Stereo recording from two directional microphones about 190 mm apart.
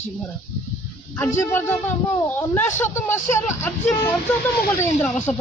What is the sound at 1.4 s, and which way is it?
Speech, 10° left (ahead or behind).